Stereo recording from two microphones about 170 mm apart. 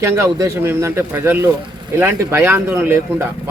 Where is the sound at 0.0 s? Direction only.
15° right (ahead or behind).